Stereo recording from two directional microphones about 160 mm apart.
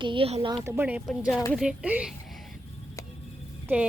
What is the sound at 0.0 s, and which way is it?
Speech, 30° right (ahead or behind).